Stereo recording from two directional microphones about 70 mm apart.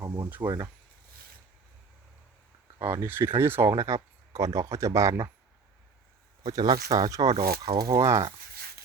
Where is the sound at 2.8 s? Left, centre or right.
Right.